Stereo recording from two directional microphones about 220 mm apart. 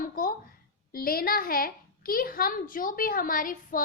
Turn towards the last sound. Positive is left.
turn(degrees=40)  # may be behind; listen again after turning